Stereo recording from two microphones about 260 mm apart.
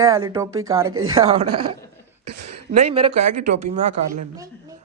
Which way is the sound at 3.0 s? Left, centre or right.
Right.